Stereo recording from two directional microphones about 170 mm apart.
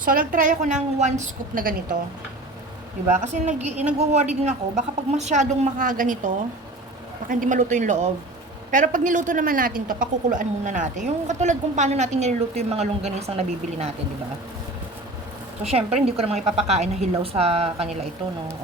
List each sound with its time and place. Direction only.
0.0 s a woman's voice: 55° right (ahead or behind)
3.1 s speech: 45° right (ahead or behind)
15.6 s a woman's voice: 35° right (ahead or behind)